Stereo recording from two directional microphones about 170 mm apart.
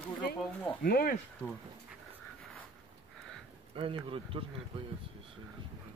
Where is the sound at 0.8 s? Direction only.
60° left (ahead or behind).